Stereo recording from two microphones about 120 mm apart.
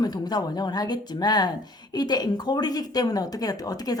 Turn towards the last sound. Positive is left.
turn(degrees=30)  # may be behind; listen again after turning